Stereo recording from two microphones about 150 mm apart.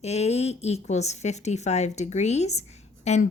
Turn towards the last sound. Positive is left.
turn(degrees=50)  # may be behind; listen again after turning